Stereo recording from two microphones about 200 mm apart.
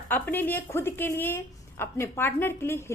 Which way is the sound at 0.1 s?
10° left (ahead or behind).